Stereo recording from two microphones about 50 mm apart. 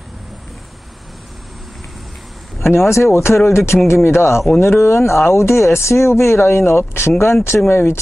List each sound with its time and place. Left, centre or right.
2.7 s speech: left
7.4 s speech: left